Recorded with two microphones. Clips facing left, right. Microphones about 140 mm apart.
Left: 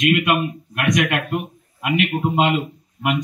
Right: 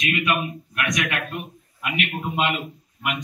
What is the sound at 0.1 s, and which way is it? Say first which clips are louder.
A man's voice: left 6 dB; 70° left (ahead or behind).